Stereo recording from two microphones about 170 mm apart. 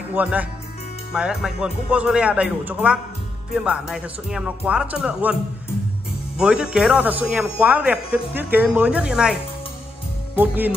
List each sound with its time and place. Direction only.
0.1 s speech: 10° right (ahead or behind)